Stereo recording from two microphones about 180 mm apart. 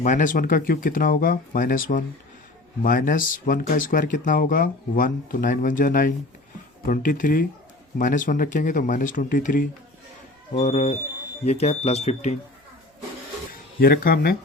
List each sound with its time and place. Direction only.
0.0 s speech: 45° left (ahead or behind)
10.5 s speech: 35° left (ahead or behind)
13.7 s speech: 55° left (ahead or behind)